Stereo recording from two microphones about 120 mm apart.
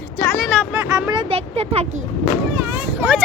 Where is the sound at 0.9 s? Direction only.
40° right (ahead or behind).